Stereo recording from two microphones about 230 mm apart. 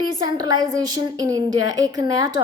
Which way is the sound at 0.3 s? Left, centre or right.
Centre.